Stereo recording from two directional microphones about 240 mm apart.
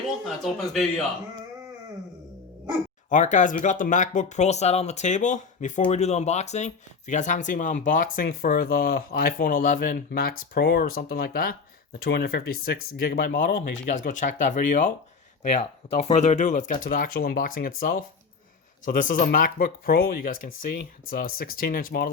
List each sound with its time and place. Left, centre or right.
0.4 s speech: centre
3.1 s speech: left